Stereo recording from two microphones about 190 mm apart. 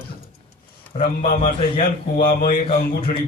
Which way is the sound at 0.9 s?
45° left (ahead or behind).